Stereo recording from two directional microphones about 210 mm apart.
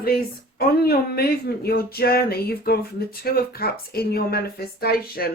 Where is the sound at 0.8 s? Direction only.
45° left (ahead or behind).